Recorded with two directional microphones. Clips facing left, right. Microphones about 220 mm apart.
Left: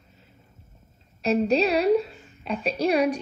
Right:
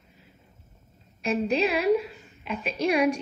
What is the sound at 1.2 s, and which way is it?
A woman's voice, 30° left (ahead or behind).